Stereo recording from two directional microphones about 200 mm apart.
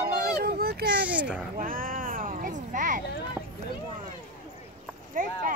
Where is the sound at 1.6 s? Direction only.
45° right (ahead or behind).